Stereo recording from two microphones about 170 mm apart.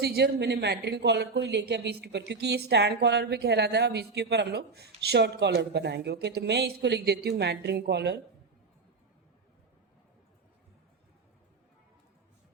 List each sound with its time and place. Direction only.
0.0 s speech: 75° right (ahead or behind)